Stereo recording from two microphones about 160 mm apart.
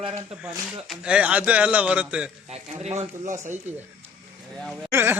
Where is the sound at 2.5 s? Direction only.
40° right (ahead or behind).